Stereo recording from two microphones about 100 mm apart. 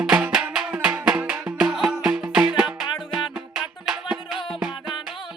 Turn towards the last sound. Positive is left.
turn(degrees=-5)  # may be behind; listen again after turning